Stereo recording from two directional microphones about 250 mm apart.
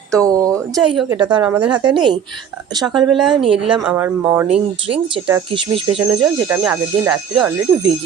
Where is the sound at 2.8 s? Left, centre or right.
Centre.